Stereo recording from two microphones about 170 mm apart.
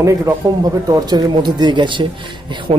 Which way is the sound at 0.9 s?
25° right (ahead or behind).